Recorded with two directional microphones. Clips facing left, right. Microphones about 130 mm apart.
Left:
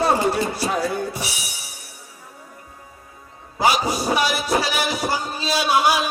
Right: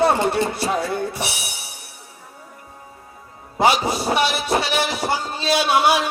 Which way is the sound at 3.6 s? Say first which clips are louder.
Right 2 dB; 25° right (ahead or behind).